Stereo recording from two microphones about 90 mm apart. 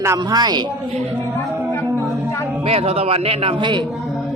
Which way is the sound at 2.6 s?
90° right.